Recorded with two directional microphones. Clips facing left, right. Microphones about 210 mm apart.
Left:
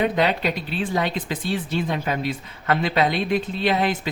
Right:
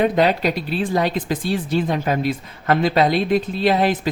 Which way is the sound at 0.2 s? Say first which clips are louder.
Right 4 dB; 40° right (ahead or behind).